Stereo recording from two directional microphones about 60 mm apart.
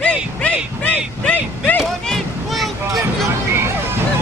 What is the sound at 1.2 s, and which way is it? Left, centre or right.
Vehicle, left.